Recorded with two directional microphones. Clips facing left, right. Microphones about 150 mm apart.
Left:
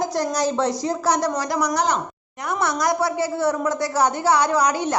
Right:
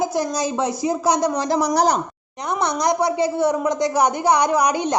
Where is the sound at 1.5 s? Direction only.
30° right (ahead or behind).